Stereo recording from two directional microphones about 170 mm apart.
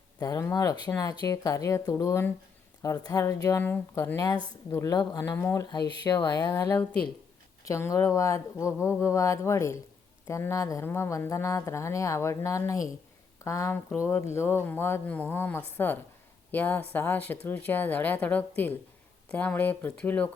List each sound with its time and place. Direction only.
0.2 s a woman's voice: 20° left (ahead or behind)